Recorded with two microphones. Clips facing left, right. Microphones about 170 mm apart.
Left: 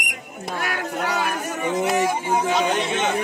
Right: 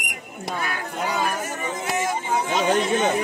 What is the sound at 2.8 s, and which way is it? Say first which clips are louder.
Speech: right 2 dB; 40° right (ahead or behind).